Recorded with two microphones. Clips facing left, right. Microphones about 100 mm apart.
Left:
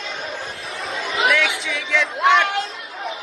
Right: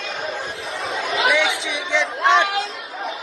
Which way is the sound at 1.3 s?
20° right (ahead or behind).